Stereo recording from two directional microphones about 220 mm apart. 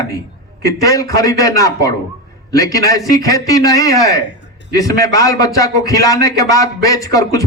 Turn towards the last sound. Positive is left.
turn(degrees=15)  # may be behind; listen again after turning